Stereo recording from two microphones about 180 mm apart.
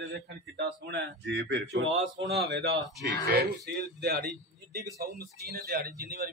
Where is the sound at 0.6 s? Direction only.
70° right (ahead or behind).